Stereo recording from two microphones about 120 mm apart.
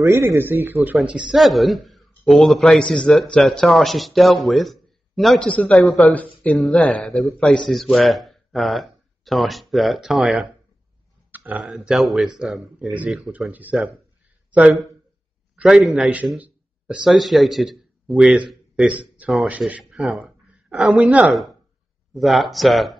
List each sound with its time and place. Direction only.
0.0 s speech: 25° right (ahead or behind)
1.0 s a man's voice: 5° right (ahead or behind)
11.3 s a sound: 10° right (ahead or behind)
11.6 s a man's voice: centre (ahead or behind)
13.5 s a man's voice: 15° right (ahead or behind)